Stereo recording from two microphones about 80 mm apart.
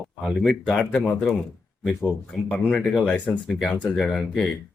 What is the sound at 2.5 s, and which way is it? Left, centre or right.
Speech, centre.